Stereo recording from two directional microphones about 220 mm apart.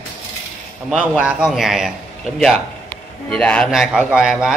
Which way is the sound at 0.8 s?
5° right (ahead or behind).